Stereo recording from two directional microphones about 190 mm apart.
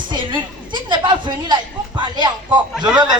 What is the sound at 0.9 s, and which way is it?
A woman's voice, 25° right (ahead or behind).